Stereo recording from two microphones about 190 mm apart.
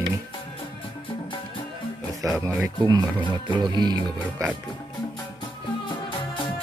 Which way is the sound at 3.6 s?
25° right (ahead or behind).